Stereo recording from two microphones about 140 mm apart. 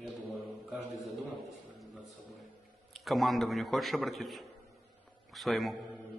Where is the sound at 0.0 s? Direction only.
5° right (ahead or behind).